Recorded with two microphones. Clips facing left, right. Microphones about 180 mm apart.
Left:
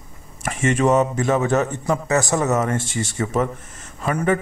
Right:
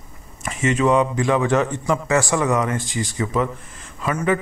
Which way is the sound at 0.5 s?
50° left (ahead or behind).